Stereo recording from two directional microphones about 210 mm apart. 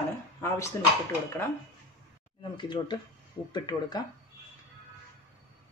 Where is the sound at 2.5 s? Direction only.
20° left (ahead or behind).